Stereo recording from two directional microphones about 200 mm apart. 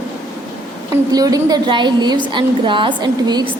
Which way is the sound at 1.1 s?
20° right (ahead or behind).